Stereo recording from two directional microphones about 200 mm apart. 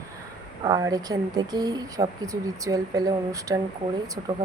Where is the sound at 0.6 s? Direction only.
15° right (ahead or behind).